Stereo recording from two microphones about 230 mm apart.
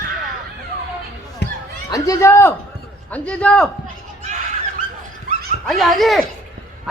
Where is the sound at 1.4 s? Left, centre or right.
Left.